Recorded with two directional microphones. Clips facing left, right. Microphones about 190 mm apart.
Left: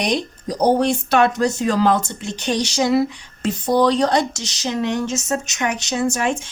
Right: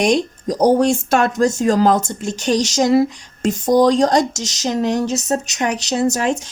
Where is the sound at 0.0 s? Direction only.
45° right (ahead or behind).